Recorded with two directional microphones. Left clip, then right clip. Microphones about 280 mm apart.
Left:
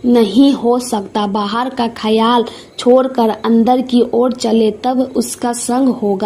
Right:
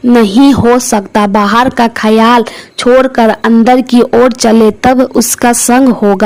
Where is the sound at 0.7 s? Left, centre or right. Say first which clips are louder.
Right 7 dB; right.